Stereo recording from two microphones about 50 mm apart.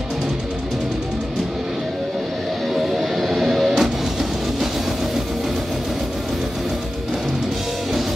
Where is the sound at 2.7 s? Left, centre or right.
Centre.